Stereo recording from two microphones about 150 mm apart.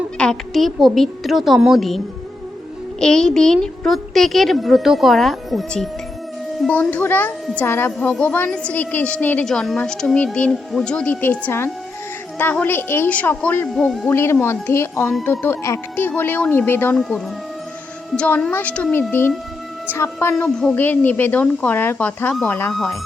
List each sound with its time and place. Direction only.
0.2 s a woman's voice: 5° left (ahead or behind)
3.0 s a woman's voice: 5° left (ahead or behind)
14.1 s a woman's voice: 15° left (ahead or behind)
17.0 s a woman's voice: centre (ahead or behind)
22.7 s speech: centre (ahead or behind)